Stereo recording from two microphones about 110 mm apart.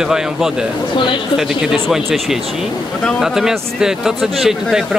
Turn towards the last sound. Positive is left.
turn(degrees=0)  # may be behind; listen again after turning